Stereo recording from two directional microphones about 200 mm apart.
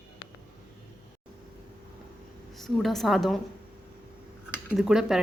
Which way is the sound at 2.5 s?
Centre (ahead or behind).